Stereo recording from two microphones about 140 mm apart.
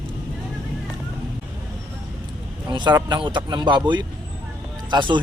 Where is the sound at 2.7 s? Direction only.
30° right (ahead or behind).